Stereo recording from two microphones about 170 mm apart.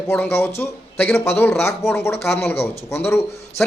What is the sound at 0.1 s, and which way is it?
Speech, 15° left (ahead or behind).